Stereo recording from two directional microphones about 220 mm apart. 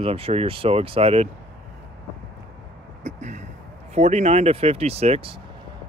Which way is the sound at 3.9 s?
30° right (ahead or behind).